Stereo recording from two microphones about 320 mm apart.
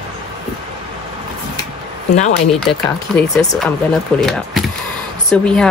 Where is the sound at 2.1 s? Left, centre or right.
Left.